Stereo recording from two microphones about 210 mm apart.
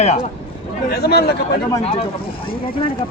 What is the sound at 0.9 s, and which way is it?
Speech, 50° left (ahead or behind).